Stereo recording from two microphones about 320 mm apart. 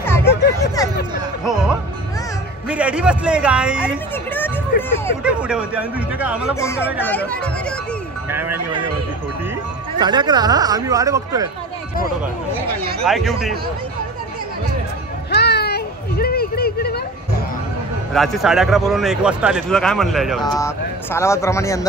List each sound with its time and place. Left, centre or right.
0.0 s hubbub: centre
1.4 s speech: centre
6.5 s speech: centre
8.3 s speech: centre
9.9 s speech: centre
13.0 s speech: centre
15.3 s children playing: left
18.1 s speech: centre